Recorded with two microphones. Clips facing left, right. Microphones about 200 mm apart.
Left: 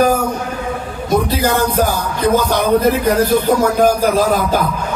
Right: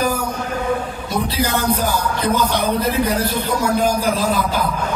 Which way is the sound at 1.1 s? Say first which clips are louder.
Left 6 dB; 45° left (ahead or behind).